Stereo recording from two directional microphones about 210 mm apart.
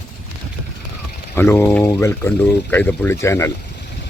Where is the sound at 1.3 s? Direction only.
10° left (ahead or behind).